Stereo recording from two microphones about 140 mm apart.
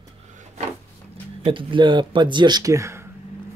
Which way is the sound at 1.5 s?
35° right (ahead or behind).